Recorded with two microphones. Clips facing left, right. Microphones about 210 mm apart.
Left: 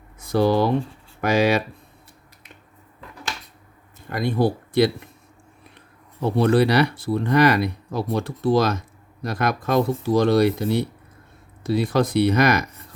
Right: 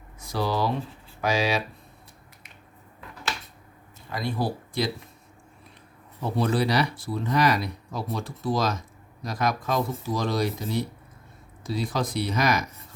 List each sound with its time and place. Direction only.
0.2 s speech: 55° left (ahead or behind)
4.1 s speech: 55° left (ahead or behind)
6.3 s speech: 65° left (ahead or behind)